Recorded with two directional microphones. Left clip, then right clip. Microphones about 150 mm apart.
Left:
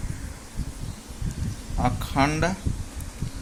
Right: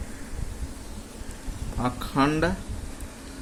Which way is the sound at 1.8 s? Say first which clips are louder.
Left 1 dB; 35° left (ahead or behind).